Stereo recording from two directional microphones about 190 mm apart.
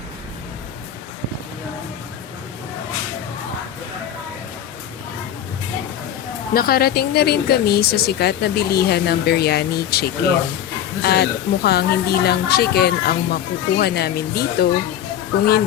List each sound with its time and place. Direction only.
6.5 s speech: 50° left (ahead or behind)